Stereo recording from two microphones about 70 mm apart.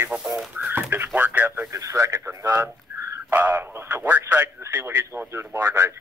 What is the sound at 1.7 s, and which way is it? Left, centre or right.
Speech, right.